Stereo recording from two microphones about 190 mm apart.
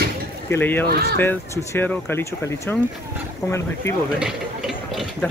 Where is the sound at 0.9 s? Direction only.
55° right (ahead or behind).